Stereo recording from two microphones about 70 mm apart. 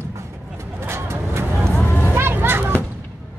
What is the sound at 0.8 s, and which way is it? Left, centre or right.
Vehicle, right.